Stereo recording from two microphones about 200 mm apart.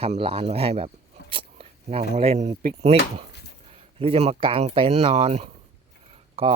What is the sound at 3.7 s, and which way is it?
Speech, 30° right (ahead or behind).